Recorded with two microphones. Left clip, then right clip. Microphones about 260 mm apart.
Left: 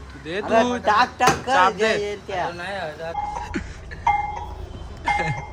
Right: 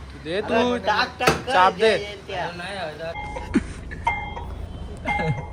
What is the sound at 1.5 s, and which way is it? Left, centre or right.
Speech, centre.